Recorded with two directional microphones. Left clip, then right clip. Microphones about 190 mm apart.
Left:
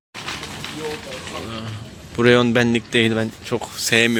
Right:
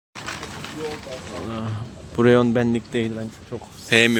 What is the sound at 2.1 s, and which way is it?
A man's voice, 15° right (ahead or behind).